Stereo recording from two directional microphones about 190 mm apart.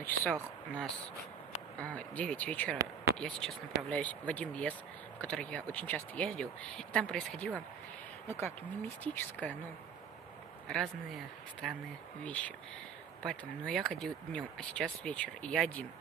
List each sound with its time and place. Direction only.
1.8 s speech: 5° left (ahead or behind)
2.7 s a sound: 15° right (ahead or behind)
3.2 s speech: 5° left (ahead or behind)
10.7 s speech: centre (ahead or behind)